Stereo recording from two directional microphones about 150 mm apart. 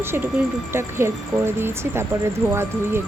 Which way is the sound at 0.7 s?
15° right (ahead or behind).